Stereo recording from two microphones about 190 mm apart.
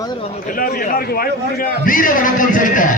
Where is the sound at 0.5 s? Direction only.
50° left (ahead or behind).